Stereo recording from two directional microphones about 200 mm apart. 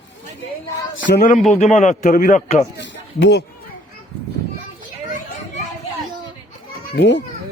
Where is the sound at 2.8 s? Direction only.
60° left (ahead or behind).